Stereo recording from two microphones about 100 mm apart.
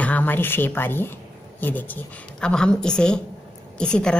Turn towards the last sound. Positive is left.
turn(degrees=10)  # may be behind; listen again after turning